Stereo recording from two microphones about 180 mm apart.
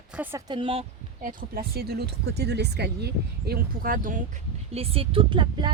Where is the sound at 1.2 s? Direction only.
50° right (ahead or behind).